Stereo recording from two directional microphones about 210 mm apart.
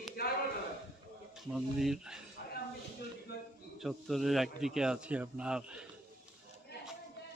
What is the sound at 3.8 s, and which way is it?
Speech, centre (ahead or behind).